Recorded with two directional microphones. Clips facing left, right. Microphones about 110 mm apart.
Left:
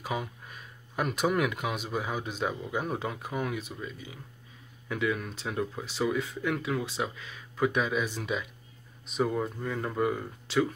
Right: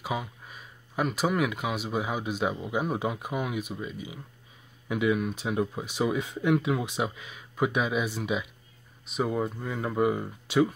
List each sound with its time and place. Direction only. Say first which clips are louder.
0.0 s speech: right 1 dB; 5° right (ahead or behind)